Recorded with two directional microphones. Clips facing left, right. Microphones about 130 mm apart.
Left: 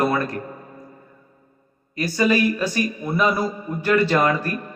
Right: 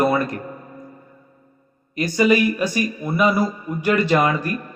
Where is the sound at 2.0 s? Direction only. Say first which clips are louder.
Right 2 dB; 15° right (ahead or behind).